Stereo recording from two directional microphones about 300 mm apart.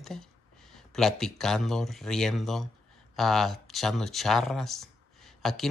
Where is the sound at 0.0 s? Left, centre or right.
Centre.